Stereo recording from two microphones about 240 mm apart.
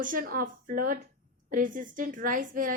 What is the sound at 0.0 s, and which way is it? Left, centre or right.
A woman's voice, right.